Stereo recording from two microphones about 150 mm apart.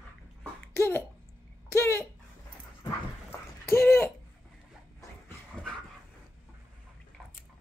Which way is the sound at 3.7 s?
15° left (ahead or behind).